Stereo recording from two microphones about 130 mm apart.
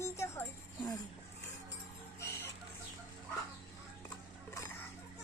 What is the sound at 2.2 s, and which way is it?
Music, 20° left (ahead or behind).